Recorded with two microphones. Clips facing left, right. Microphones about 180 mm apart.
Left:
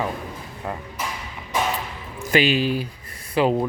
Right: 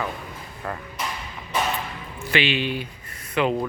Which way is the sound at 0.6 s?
15° left (ahead or behind).